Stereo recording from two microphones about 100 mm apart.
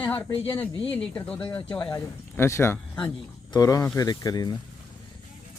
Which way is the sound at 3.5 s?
35° left (ahead or behind).